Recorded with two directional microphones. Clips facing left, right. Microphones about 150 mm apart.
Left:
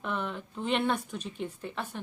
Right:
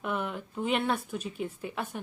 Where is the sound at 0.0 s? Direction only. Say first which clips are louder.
Right 1 dB; 10° right (ahead or behind).